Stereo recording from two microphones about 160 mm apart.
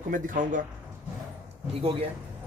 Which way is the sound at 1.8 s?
35° right (ahead or behind).